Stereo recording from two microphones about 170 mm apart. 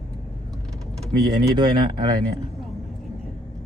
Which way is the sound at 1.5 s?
25° right (ahead or behind).